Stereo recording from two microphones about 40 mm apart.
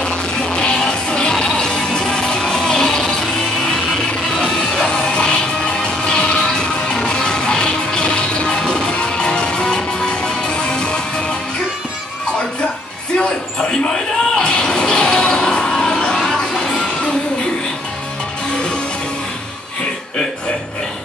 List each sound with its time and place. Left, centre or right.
0.0 s music: left
4.8 s music: left
10.5 s music: left
13.2 s a sound: centre
14.4 s music: centre